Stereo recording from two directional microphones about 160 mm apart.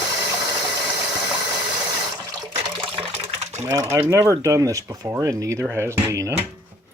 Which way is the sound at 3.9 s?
15° right (ahead or behind).